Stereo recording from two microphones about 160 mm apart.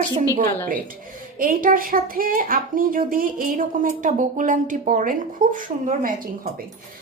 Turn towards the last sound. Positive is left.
turn(degrees=-55)  # may be behind; listen again after turning